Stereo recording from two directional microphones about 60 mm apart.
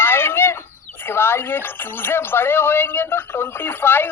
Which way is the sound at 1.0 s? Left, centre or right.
Left.